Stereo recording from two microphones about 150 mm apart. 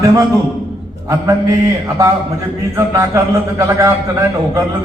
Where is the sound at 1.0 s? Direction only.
20° right (ahead or behind).